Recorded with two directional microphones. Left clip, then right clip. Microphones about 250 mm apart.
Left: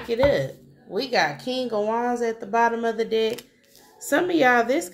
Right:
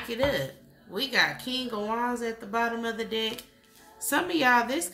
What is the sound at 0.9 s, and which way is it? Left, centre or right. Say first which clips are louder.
Speech: left 3 dB; centre.